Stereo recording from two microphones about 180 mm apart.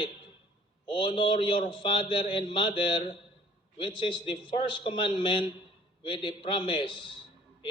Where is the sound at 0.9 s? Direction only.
30° left (ahead or behind).